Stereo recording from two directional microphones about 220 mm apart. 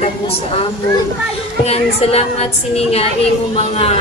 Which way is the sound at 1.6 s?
25° left (ahead or behind).